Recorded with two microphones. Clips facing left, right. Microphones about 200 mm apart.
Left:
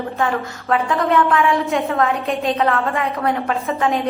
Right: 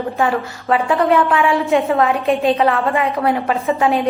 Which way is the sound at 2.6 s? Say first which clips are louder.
Right 3 dB; 15° right (ahead or behind).